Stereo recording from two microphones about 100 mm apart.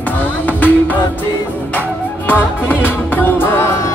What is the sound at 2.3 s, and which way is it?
Music, 20° left (ahead or behind).